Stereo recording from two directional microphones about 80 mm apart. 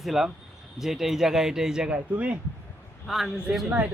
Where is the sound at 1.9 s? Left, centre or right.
Centre.